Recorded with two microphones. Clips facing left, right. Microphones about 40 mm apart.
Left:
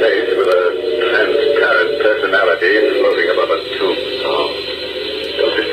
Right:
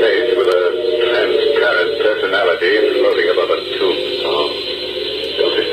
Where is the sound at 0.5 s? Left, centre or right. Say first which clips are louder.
Even; centre.